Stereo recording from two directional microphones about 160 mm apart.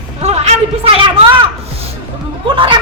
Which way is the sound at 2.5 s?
30° right (ahead or behind).